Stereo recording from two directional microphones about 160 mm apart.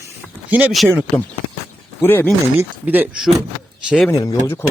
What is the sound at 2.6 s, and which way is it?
Speech, 10° right (ahead or behind).